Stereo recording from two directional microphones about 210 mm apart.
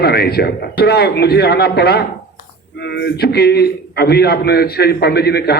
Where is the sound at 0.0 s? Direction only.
50° left (ahead or behind).